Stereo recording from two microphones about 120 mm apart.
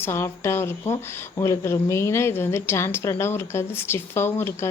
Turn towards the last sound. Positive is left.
turn(degrees=20)  # may be behind; listen again after turning